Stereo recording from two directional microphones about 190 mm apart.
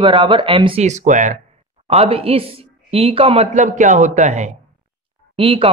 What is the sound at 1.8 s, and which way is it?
Speech, 30° right (ahead or behind).